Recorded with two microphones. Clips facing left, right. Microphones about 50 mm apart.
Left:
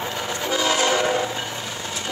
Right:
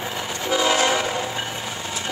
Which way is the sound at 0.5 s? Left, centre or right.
Centre.